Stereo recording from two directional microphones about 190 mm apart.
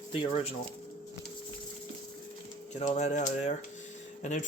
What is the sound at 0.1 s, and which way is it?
Speech, 30° left (ahead or behind).